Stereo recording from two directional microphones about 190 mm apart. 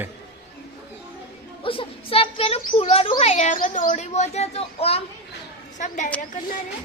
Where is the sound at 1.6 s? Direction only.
30° left (ahead or behind).